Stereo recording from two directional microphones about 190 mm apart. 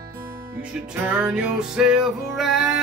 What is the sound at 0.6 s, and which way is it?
Music, 5° right (ahead or behind).